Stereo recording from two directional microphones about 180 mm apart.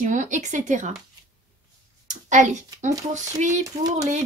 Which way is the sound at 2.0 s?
40° right (ahead or behind).